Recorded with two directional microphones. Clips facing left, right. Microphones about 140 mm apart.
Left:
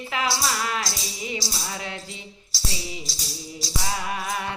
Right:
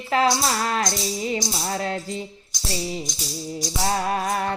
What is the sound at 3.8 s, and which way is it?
Music, 40° right (ahead or behind).